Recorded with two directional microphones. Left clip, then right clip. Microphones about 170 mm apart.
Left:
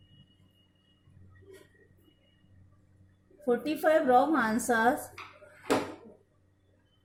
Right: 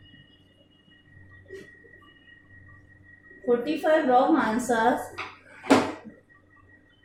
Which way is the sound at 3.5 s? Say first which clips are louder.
Right 4 dB; 50° left (ahead or behind).